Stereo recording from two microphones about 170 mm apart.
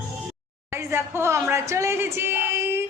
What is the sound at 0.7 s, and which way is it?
Speech, 15° right (ahead or behind).